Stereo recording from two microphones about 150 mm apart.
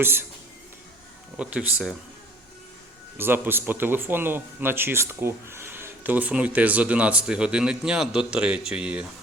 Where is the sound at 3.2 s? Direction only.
15° right (ahead or behind).